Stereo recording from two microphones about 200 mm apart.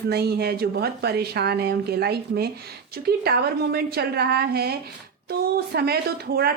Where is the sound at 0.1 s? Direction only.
50° right (ahead or behind).